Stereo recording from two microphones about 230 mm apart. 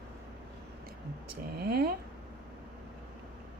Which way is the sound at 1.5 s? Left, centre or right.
Right.